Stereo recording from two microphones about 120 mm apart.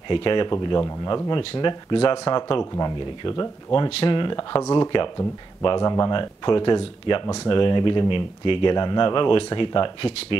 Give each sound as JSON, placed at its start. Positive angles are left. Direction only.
{"t": 0.1, "sound": "speech", "side_deg": 45}
{"t": 6.1, "sound": "speech", "side_deg": 40}